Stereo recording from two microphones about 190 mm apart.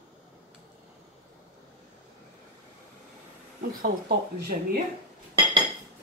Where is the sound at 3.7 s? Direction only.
50° right (ahead or behind).